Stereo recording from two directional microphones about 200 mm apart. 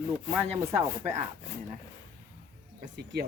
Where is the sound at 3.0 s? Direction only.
55° right (ahead or behind).